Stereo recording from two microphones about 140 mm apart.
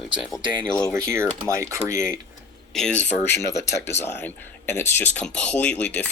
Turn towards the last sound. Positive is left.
turn(degrees=10)  # may be behind; listen again after turning